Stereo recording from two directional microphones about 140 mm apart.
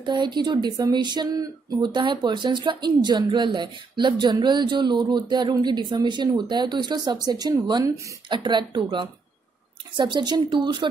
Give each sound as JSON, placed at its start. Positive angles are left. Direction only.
{"t": 0.0, "sound": "speech", "side_deg": -30}